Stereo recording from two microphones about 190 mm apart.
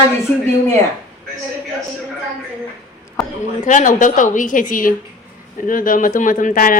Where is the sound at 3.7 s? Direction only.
40° left (ahead or behind).